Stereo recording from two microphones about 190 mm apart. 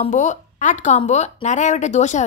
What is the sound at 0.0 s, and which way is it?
Speech, 40° left (ahead or behind).